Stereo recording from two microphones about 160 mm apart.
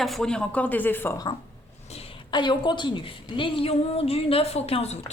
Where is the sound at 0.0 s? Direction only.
Centre (ahead or behind).